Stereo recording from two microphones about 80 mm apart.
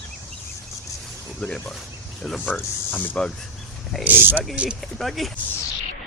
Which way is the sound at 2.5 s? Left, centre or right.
Left.